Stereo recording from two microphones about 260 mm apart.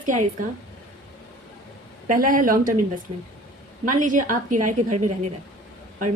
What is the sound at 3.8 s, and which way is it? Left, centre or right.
A woman's voice, right.